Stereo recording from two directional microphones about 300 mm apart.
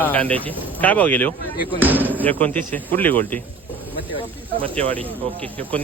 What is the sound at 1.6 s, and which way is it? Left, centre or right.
Speech, centre.